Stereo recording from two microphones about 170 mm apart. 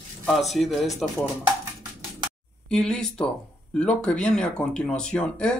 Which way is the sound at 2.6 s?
5° left (ahead or behind).